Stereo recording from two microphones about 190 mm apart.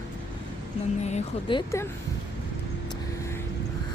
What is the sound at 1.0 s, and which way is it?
Speech, 30° left (ahead or behind).